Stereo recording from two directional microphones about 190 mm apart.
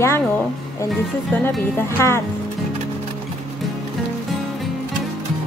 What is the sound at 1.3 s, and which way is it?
Speech, 10° left (ahead or behind).